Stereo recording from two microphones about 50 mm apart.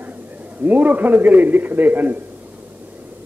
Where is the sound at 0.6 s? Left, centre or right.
Right.